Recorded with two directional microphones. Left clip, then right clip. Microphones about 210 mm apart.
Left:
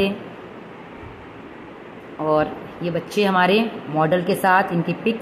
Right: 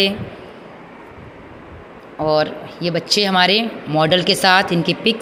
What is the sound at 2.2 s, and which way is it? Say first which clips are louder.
Speech: right 3 dB; 20° right (ahead or behind).